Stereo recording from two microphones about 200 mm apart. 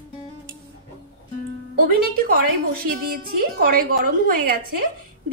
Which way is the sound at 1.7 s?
50° right (ahead or behind).